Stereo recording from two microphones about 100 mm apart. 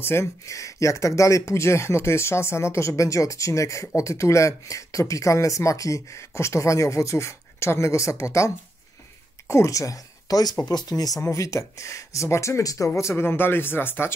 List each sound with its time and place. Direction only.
0.0 s speech: 25° left (ahead or behind)